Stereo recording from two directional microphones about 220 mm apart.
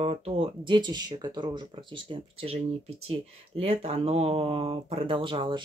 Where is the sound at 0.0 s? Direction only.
30° right (ahead or behind).